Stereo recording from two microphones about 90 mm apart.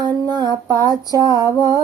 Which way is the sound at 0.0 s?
50° right (ahead or behind).